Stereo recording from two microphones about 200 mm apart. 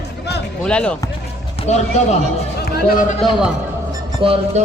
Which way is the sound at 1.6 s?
35° left (ahead or behind).